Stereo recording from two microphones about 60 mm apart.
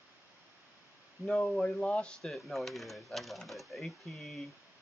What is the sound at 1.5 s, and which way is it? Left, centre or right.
Speech, centre.